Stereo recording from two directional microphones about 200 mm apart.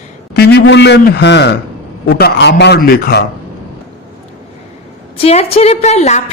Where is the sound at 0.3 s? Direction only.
55° left (ahead or behind).